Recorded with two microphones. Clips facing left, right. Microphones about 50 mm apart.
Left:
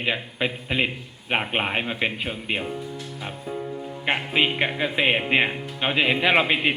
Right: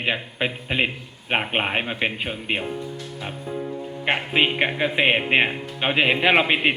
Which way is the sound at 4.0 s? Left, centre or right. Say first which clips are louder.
Right 2 dB; right.